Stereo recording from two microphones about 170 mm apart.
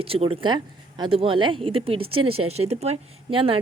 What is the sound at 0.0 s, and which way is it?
Speech, 35° right (ahead or behind).